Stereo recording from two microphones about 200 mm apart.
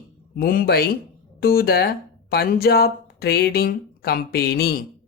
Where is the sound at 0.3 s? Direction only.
45° left (ahead or behind).